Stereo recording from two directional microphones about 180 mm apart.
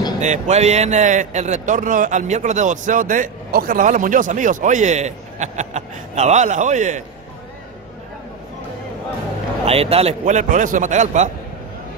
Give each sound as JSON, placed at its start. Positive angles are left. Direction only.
{"t": 0.2, "sound": "a man's voice", "side_deg": -40}
{"t": 9.7, "sound": "a man's voice", "side_deg": -35}